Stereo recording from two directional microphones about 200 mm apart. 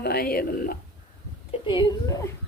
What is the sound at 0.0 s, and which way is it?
Speech, 50° left (ahead or behind).